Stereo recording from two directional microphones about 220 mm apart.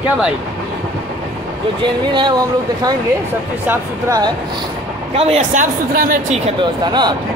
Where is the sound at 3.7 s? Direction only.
15° right (ahead or behind).